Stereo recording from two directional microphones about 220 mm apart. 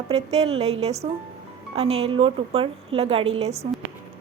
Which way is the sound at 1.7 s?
25° right (ahead or behind).